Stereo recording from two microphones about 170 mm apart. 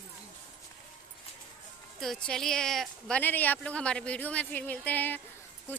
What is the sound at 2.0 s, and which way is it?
A woman's voice, 5° left (ahead or behind).